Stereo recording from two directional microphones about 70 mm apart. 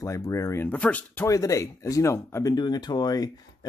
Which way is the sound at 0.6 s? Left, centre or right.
Left.